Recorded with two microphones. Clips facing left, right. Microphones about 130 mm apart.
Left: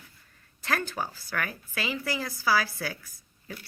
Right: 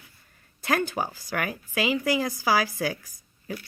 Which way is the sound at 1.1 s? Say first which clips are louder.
Right 5 dB; 40° right (ahead or behind).